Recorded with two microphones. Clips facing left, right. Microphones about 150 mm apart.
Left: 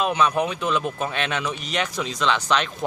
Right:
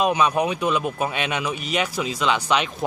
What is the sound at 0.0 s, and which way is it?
Speech, 15° right (ahead or behind).